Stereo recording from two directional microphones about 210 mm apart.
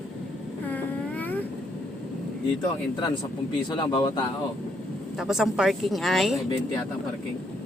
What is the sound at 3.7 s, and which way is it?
Speech, 20° left (ahead or behind).